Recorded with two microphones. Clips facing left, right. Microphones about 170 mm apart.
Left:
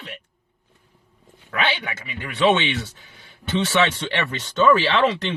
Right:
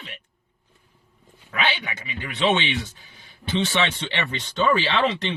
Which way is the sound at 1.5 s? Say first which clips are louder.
Left 2 dB; 65° left (ahead or behind).